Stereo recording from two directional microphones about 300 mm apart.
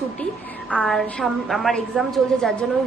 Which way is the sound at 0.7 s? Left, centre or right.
Centre.